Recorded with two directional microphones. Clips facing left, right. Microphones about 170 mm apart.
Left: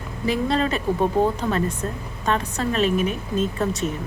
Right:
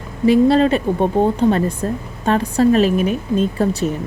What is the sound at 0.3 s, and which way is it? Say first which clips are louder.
Speech: right 10 dB; 35° right (ahead or behind).